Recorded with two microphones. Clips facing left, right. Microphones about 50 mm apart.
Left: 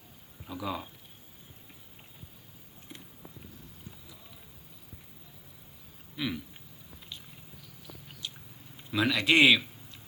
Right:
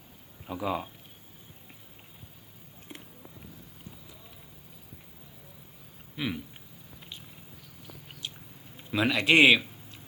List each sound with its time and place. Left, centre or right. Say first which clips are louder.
0.4 s speech: right 4 dB; right
2.9 s a sound: right 3 dB; right
6.1 s speech: right 1 dB; right
8.9 s speech: right 2 dB; right